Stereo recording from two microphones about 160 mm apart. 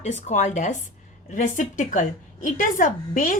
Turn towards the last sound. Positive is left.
turn(degrees=55)  # may be behind; listen again after turning